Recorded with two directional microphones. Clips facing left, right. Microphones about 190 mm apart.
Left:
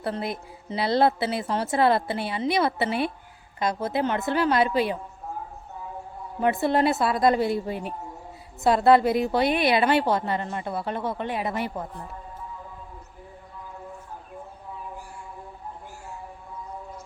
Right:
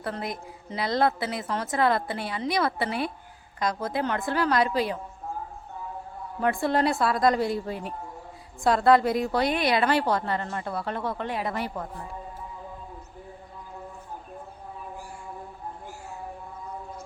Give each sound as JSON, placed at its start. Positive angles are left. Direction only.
{"t": 0.0, "sound": "a woman's voice", "side_deg": 25}
{"t": 6.4, "sound": "a woman's voice", "side_deg": 20}
{"t": 8.7, "sound": "a woman's voice", "side_deg": 25}
{"t": 11.3, "sound": "speech", "side_deg": 0}